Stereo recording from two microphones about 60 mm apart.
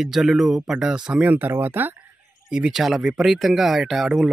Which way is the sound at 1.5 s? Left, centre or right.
Right.